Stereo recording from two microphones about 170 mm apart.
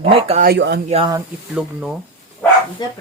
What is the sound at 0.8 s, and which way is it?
Speech, 35° right (ahead or behind).